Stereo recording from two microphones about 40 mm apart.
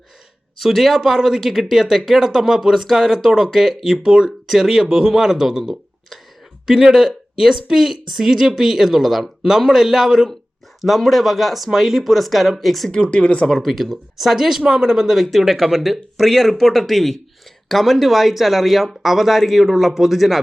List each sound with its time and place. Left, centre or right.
0.6 s a woman's voice: centre
4.4 s a woman's voice: centre
10.8 s speech: centre
12.9 s speech: left
13.7 s a woman's voice: centre
15.1 s speech: centre